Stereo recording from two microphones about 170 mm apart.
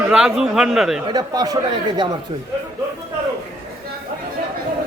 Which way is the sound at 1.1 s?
20° right (ahead or behind).